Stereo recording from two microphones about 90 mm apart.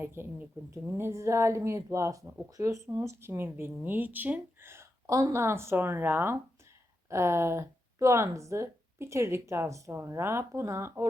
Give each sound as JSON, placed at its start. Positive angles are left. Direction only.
{"t": 0.0, "sound": "a woman's voice", "side_deg": -25}